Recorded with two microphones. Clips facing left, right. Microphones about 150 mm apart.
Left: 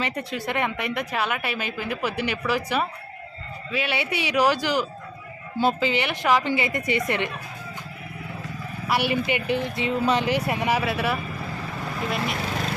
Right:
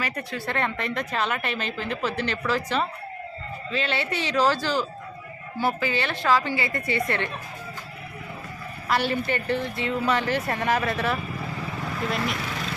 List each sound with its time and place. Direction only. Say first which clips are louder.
0.0 s a woman's voice: left 2 dB; 20° left (ahead or behind)
8.9 s a woman's voice: left 1 dB; 10° left (ahead or behind)